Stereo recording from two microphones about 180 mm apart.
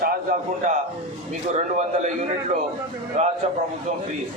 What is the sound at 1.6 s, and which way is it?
A man's voice, 40° right (ahead or behind).